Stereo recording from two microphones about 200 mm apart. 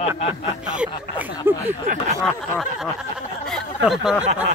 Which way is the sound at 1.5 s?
10° right (ahead or behind).